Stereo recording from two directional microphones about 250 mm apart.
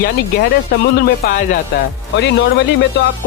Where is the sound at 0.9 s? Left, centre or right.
Left.